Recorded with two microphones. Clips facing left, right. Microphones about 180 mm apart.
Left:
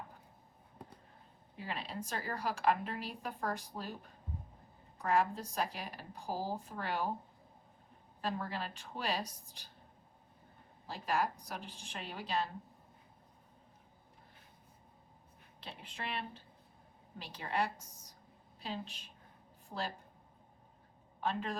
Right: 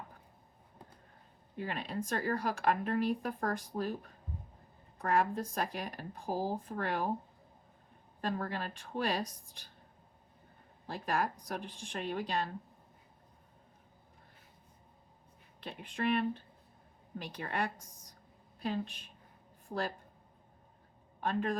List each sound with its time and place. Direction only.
1.5 s speech: 50° right (ahead or behind)
4.9 s speech: 55° right (ahead or behind)
8.3 s speech: 50° right (ahead or behind)
10.8 s speech: 50° right (ahead or behind)
15.6 s a woman's voice: 50° right (ahead or behind)
21.2 s speech: 50° right (ahead or behind)